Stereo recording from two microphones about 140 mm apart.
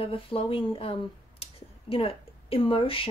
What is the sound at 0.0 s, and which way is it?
Speech, 40° left (ahead or behind).